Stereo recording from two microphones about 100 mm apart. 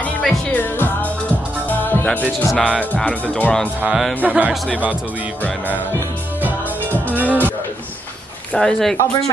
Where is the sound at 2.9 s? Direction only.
10° left (ahead or behind).